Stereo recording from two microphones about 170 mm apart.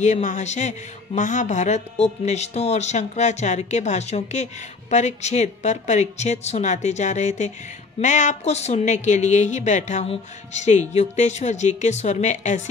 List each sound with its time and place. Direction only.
0.0 s a woman's voice: 45° left (ahead or behind)